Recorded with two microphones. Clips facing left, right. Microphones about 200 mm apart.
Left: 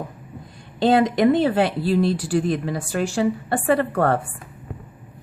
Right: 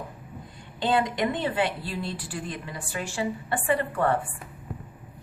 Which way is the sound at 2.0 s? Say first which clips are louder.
Left 14 dB; 75° left (ahead or behind).